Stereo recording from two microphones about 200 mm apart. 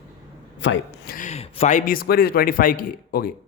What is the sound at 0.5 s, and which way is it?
Speech, 65° left (ahead or behind).